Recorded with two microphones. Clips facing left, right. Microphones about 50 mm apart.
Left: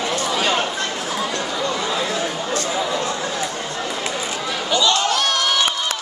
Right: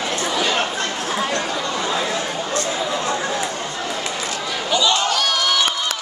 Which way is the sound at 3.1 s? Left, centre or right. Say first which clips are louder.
Right 2 dB; centre.